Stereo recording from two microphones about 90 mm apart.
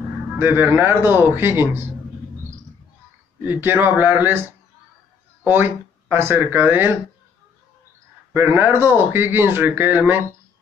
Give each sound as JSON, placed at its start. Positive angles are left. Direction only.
{"t": 0.4, "sound": "speech", "side_deg": -25}
{"t": 3.4, "sound": "speech", "side_deg": -25}
{"t": 8.3, "sound": "speech", "side_deg": -20}